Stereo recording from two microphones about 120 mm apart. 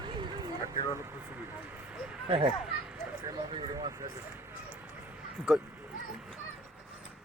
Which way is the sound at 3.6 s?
30° right (ahead or behind).